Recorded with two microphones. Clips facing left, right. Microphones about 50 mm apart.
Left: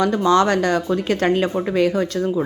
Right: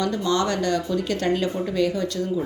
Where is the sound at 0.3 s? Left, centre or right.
Left.